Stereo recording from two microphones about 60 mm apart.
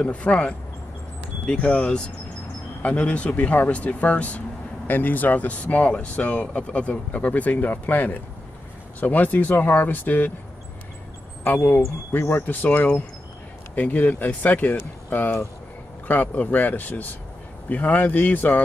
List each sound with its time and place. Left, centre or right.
0.0 s speech: centre
11.4 s speech: left